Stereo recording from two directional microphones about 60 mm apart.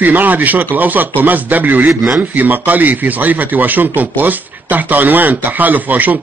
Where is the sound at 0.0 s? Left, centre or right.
Right.